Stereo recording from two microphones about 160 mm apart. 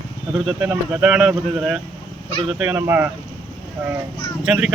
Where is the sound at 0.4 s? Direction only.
5° right (ahead or behind).